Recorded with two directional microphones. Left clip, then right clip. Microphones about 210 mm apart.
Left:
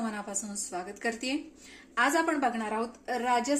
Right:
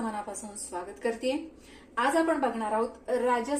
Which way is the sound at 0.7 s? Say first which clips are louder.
Right 2 dB; 55° left (ahead or behind).